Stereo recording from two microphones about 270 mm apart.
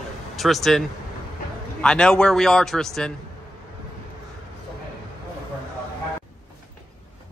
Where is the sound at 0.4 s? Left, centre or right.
Centre.